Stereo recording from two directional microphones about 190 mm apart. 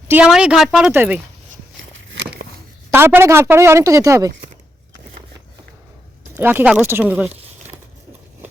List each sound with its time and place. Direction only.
0.1 s a woman's voice: 5° right (ahead or behind)
1.9 s a sound: 80° right
2.9 s a woman's voice: 10° right (ahead or behind)
6.3 s a woman's voice: 10° right (ahead or behind)